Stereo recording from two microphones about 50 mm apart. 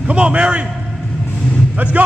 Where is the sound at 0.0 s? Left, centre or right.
Right.